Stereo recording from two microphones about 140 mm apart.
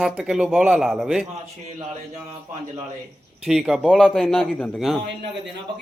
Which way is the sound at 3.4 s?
5° right (ahead or behind).